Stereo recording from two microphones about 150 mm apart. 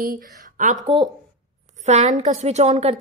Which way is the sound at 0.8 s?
35° right (ahead or behind).